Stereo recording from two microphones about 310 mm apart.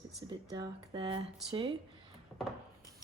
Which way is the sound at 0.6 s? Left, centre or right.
Centre.